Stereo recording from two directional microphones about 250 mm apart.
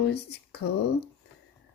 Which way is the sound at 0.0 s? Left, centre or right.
Left.